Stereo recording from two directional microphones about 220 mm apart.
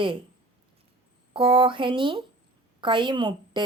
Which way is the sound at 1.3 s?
25° right (ahead or behind).